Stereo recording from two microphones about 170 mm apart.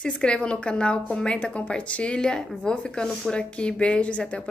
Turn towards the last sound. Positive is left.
turn(degrees=5)  # may be behind; listen again after turning